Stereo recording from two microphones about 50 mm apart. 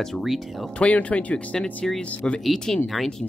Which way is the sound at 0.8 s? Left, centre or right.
Left.